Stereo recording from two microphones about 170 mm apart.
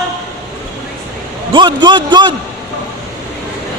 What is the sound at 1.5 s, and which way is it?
Speech, 25° right (ahead or behind).